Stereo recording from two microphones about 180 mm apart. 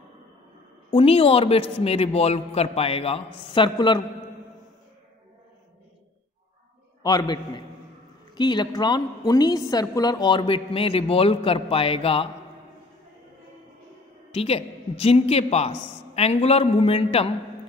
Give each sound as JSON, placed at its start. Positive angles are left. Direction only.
{"t": 0.8, "sound": "a man's voice", "side_deg": 30}
{"t": 7.0, "sound": "a woman's voice", "side_deg": 20}
{"t": 14.3, "sound": "a man's voice", "side_deg": 35}